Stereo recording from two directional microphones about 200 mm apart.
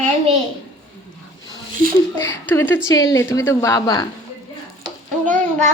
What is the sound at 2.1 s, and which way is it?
A woman's voice, 10° left (ahead or behind).